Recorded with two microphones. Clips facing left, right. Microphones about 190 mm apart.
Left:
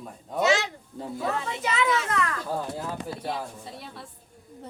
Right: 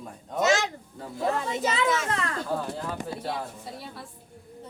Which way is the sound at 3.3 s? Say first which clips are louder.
Even; centre (ahead or behind).